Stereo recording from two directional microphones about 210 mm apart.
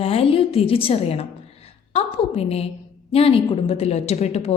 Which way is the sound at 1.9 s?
30° left (ahead or behind).